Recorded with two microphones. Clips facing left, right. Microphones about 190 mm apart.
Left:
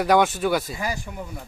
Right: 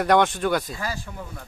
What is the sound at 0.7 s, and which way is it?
Speech, 15° left (ahead or behind).